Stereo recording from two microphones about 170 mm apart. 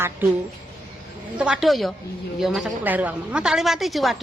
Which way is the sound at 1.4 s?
5° right (ahead or behind).